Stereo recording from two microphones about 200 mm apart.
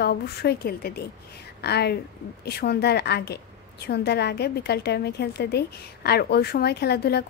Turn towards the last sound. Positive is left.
turn(degrees=55)  # may be behind; listen again after turning